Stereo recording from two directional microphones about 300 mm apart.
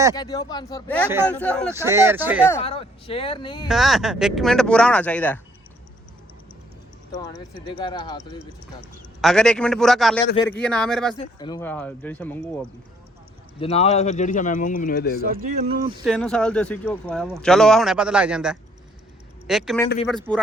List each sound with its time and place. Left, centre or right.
0.2 s speech: centre
1.7 s speech: centre
2.6 s speech: centre
3.7 s speech: centre
7.1 s speech: centre
9.2 s speech: centre
11.2 s speech: centre
13.6 s speech: left
15.2 s speech: right
16.0 s speech: centre